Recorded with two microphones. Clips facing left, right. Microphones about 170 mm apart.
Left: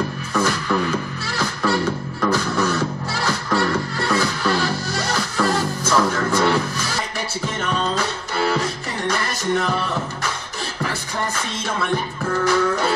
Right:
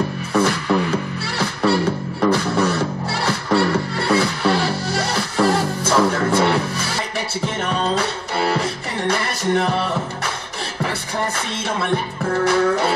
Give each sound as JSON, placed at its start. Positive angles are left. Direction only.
{"t": 0.3, "sound": "music", "side_deg": -30}
{"t": 12.4, "sound": "music", "side_deg": -30}